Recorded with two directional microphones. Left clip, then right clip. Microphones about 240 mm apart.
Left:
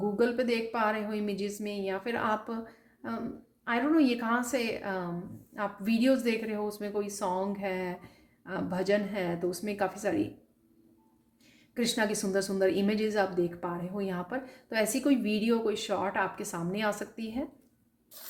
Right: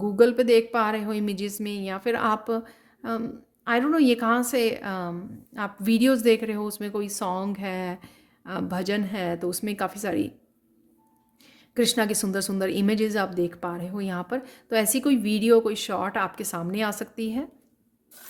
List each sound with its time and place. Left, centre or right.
0.2 s speech: right
11.7 s speech: right